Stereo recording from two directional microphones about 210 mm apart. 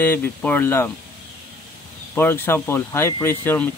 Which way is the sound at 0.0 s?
10° left (ahead or behind).